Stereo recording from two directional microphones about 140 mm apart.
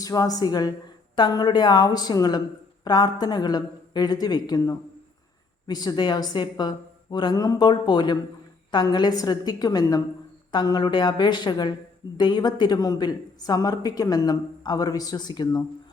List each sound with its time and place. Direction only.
0.0 s a woman's voice: 25° left (ahead or behind)